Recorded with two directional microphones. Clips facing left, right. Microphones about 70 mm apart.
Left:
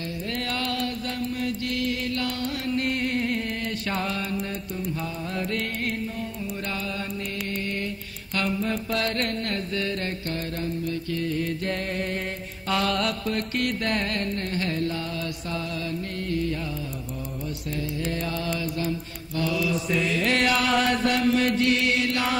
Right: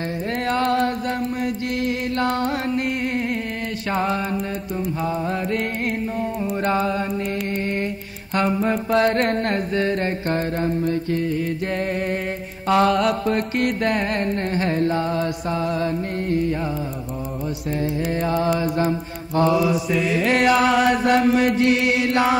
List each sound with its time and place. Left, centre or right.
0.5 s chant: right
2.1 s music: right
4.0 s music: right
6.6 s chant: right
8.4 s music: right
11.2 s music: centre
18.1 s music: right
18.6 s mantra: right
19.7 s music: centre
20.7 s chant: centre
21.1 s music: right